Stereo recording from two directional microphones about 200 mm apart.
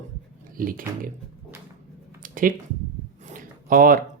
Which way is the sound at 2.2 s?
45° right (ahead or behind).